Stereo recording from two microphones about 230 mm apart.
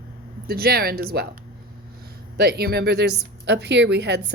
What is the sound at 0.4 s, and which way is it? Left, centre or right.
Speech, right.